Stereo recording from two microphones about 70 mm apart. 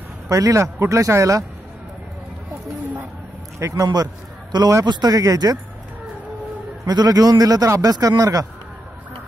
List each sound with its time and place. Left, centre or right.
0.3 s speech: right
3.5 s speech: right
3.8 s a man's voice: right
6.9 s a man's voice: right